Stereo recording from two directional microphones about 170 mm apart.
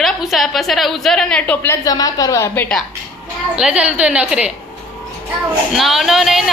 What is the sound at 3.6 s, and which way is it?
Speech, 5° right (ahead or behind).